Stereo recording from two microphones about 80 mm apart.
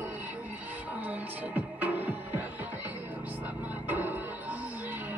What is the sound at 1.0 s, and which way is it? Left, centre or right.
Music, right.